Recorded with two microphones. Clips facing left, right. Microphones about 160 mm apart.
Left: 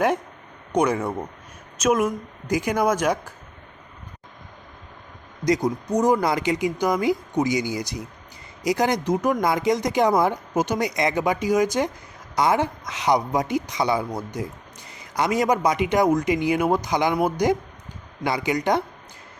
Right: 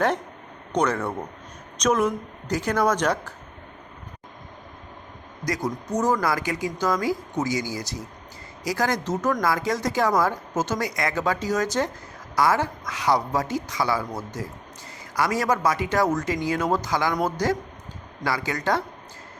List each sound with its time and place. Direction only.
0.7 s speech: 10° left (ahead or behind)
5.5 s speech: 15° left (ahead or behind)